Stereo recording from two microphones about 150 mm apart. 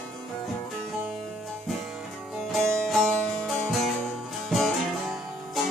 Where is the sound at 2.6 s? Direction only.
15° right (ahead or behind).